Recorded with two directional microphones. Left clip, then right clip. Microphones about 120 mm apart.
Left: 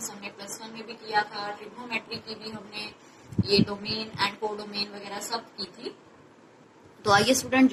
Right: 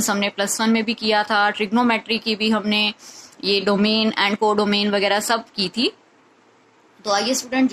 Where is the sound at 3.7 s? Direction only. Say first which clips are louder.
Right 14 dB; 55° right (ahead or behind).